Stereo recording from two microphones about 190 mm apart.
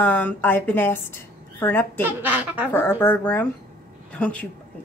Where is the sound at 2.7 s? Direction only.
10° left (ahead or behind).